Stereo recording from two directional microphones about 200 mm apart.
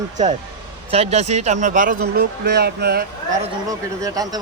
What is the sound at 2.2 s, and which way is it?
Speech, 55° right (ahead or behind).